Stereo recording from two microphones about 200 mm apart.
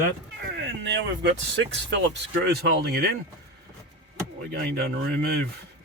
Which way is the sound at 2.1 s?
55° right (ahead or behind).